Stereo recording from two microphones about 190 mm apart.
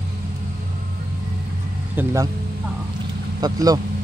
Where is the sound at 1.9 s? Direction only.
15° right (ahead or behind).